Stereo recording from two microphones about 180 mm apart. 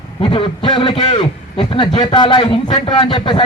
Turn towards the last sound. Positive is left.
turn(degrees=25)  # may be behind; listen again after turning